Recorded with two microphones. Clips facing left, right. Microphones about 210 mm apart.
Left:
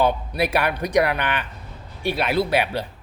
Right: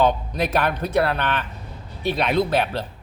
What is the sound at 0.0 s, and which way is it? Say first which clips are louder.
Speech: even; 10° left (ahead or behind).